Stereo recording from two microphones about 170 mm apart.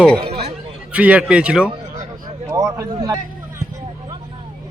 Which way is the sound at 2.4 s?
20° right (ahead or behind).